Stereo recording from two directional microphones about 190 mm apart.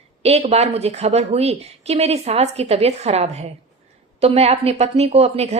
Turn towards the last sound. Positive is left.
turn(degrees=-35)  # may be behind; listen again after turning